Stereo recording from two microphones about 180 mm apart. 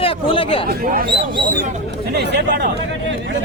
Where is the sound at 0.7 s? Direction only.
55° right (ahead or behind).